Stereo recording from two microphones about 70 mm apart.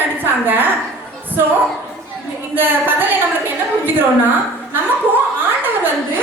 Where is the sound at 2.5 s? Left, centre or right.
Right.